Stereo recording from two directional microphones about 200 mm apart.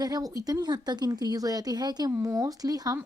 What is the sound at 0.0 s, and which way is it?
Speech, 20° right (ahead or behind).